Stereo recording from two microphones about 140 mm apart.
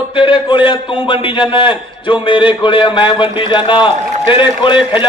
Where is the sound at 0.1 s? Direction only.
35° left (ahead or behind).